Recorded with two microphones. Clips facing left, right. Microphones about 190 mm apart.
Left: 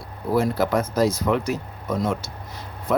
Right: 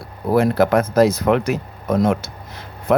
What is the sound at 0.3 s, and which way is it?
Speech, 65° right (ahead or behind).